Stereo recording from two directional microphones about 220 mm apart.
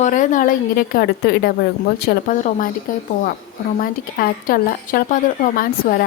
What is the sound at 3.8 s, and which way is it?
Speech, 40° left (ahead or behind).